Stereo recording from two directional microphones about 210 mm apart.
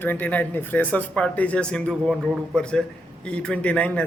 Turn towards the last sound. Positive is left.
turn(degrees=5)  # may be behind; listen again after turning